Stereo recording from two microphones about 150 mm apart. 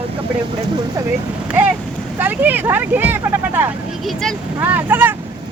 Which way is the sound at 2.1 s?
15° right (ahead or behind).